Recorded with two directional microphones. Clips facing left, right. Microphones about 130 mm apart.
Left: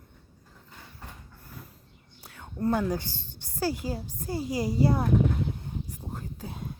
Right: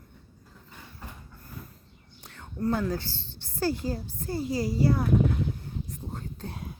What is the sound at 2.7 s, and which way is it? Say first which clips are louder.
A woman's voice: left 1 dB; 15° left (ahead or behind).